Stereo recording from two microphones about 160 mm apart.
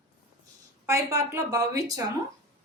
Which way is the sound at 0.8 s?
15° right (ahead or behind).